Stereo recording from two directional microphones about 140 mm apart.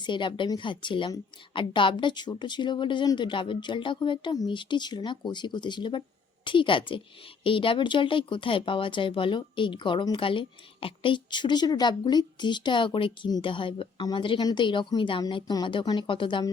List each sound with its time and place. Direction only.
0.0 s speech: 35° left (ahead or behind)